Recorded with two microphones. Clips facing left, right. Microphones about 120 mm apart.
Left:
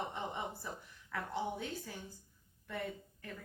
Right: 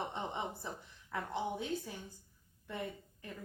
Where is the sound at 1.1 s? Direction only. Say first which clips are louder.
Right 1 dB; 20° right (ahead or behind).